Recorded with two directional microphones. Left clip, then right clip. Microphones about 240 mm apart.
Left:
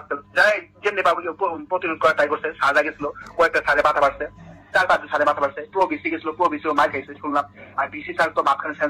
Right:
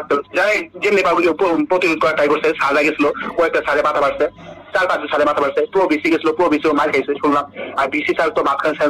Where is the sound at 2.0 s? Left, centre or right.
Right.